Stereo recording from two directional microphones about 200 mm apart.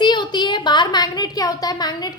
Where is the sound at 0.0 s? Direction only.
20° left (ahead or behind).